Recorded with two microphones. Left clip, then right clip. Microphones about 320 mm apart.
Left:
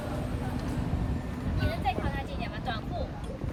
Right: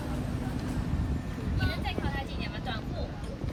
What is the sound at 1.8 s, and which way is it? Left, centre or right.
Vehicle, left.